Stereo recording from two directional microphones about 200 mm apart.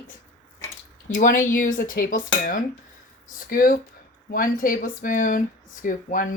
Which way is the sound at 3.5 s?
45° left (ahead or behind).